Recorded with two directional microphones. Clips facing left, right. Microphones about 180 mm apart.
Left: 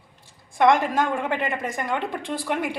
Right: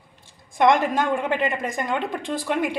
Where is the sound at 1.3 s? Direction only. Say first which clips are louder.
Right 2 dB; 20° right (ahead or behind).